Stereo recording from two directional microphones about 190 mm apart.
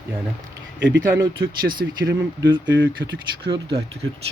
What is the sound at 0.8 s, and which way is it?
Speech, 70° right (ahead or behind).